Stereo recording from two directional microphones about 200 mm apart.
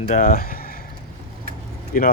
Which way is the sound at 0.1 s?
45° left (ahead or behind).